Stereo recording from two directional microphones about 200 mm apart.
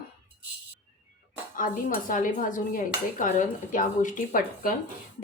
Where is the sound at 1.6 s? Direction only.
40° left (ahead or behind).